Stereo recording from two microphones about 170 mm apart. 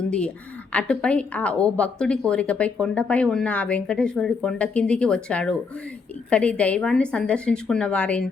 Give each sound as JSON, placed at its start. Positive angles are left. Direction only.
{"t": 0.7, "sound": "a woman's voice", "side_deg": 5}